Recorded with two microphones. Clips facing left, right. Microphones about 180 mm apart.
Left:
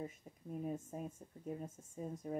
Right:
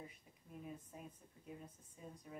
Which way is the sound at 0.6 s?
45° left (ahead or behind).